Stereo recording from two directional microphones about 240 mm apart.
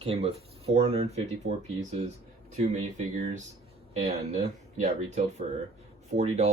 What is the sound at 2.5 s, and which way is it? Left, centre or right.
Speech, right.